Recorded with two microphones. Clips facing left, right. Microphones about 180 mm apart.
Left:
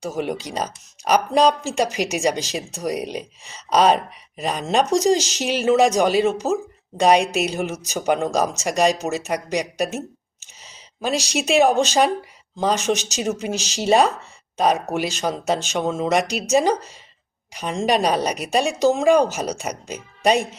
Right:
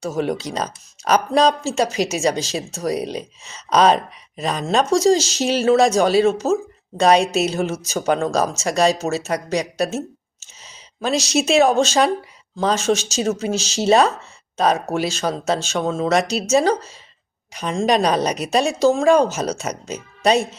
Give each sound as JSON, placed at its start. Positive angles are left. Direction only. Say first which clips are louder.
{"t": 0.0, "sound": "speech", "louder": "right 3 dB", "side_deg": 15}
{"t": 11.0, "sound": "speech", "louder": "right 3 dB", "side_deg": 10}